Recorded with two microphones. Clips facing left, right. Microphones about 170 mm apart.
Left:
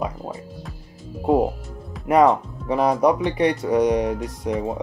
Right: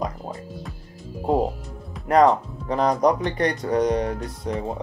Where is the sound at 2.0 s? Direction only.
10° left (ahead or behind).